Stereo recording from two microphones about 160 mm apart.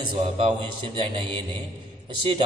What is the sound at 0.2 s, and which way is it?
Speech, 35° right (ahead or behind).